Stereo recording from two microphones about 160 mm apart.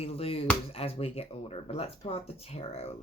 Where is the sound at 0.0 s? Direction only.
40° left (ahead or behind).